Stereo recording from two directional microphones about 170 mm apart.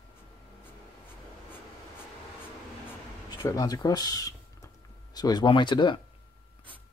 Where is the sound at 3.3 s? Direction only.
20° left (ahead or behind).